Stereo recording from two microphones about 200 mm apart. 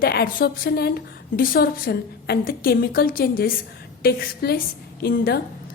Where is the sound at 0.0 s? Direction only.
50° left (ahead or behind).